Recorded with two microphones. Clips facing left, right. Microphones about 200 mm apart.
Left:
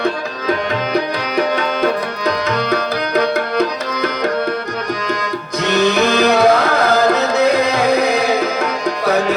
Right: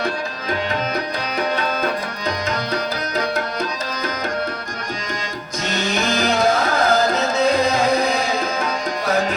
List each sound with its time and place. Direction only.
1.4 s tabla: 65° left (ahead or behind)
5.6 s music: 65° left (ahead or behind)